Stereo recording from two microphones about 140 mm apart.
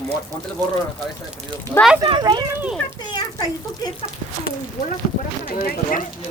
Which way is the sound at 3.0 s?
30° left (ahead or behind).